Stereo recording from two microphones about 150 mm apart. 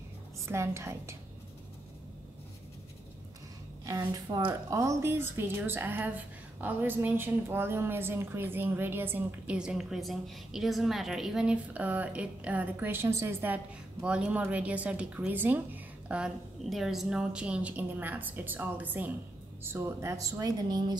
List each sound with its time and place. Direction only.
0.5 s a woman's voice: 20° right (ahead or behind)
3.8 s a woman's voice: 20° right (ahead or behind)